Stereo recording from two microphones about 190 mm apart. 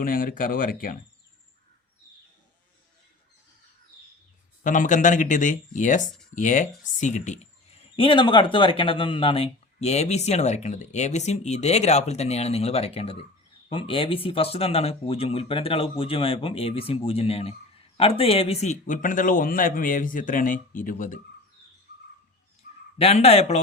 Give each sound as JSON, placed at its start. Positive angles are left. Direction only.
{"t": 0.0, "sound": "speech", "side_deg": 50}
{"t": 4.6, "sound": "speech", "side_deg": 40}
{"t": 7.9, "sound": "speech", "side_deg": 25}
{"t": 23.0, "sound": "speech", "side_deg": 30}